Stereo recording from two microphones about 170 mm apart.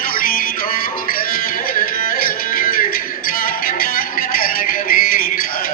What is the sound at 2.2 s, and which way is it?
Music, 55° left (ahead or behind).